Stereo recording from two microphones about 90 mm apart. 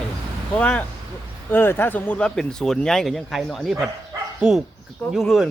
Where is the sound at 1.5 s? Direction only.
25° left (ahead or behind); by 5.5 s centre (ahead or behind).